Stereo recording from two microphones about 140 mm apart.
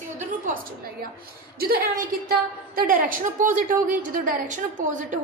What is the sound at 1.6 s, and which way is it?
A woman's voice, 90° right.